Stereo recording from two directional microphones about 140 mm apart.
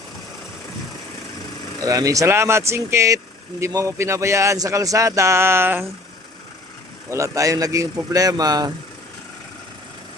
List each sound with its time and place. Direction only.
1.8 s a man's voice: 25° right (ahead or behind)
7.1 s a man's voice: 20° right (ahead or behind)